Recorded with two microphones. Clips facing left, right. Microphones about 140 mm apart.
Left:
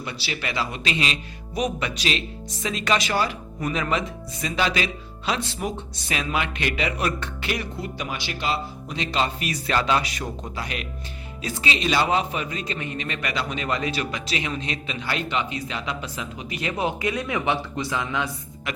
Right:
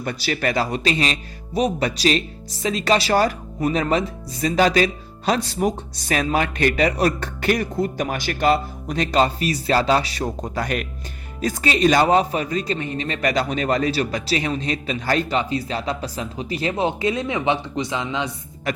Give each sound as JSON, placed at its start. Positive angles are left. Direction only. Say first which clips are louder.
{"t": 0.0, "sound": "speech", "louder": "right 8 dB", "side_deg": -45}